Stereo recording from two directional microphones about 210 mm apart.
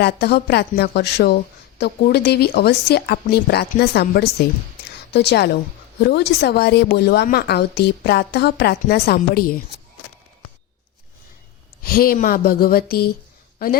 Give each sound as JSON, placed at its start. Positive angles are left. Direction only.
{"t": 0.0, "sound": "a woman's voice", "side_deg": 50}
{"t": 11.8, "sound": "a woman's voice", "side_deg": 45}